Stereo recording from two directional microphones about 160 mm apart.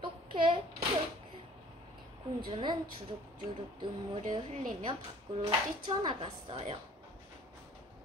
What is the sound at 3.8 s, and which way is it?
A child's voice, 35° right (ahead or behind).